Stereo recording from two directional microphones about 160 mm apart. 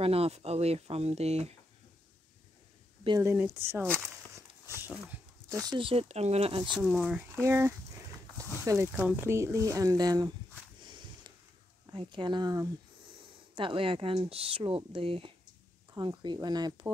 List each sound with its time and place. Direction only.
0.0 s speech: 40° right (ahead or behind)
3.2 s speech: 15° right (ahead or behind)
3.9 s a sound: 15° right (ahead or behind); by 6.6 s 40° right (ahead or behind)
6.6 s speech: 5° right (ahead or behind)
7.3 s speech: 15° right (ahead or behind)
10.8 s a sound: 30° right (ahead or behind)
11.8 s speech: 30° right (ahead or behind)